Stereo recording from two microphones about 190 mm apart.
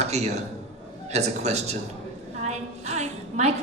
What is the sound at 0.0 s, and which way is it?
A man's voice, 35° right (ahead or behind).